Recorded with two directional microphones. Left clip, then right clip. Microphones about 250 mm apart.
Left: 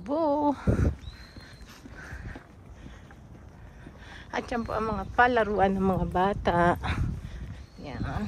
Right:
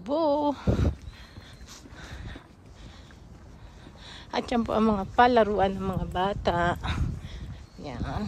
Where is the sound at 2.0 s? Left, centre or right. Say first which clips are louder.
Left 2 dB; right.